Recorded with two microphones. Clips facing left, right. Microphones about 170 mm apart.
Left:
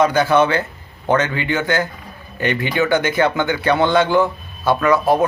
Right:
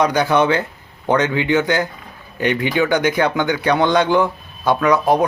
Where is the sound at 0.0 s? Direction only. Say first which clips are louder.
Left 1 dB; 15° right (ahead or behind).